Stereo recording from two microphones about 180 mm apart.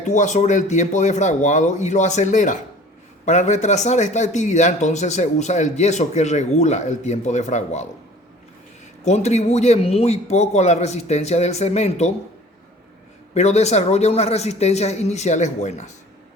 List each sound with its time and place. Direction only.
0.0 s speech: 40° left (ahead or behind)
9.0 s speech: 40° left (ahead or behind)
13.3 s speech: 35° left (ahead or behind)